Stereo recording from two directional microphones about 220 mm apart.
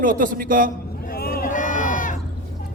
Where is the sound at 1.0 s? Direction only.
40° left (ahead or behind).